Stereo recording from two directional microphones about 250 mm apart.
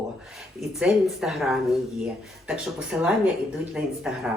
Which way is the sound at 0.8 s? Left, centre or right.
Centre.